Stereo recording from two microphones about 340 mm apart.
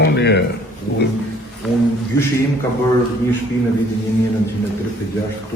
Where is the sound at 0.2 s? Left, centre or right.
Left.